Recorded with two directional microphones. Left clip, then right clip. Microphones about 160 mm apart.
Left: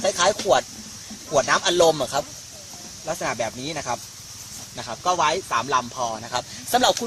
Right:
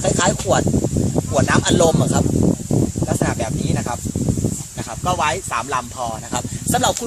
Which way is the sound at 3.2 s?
10° left (ahead or behind).